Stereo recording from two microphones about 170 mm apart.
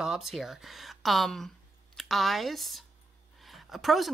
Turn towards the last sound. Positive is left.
turn(degrees=0)  # may be behind; listen again after turning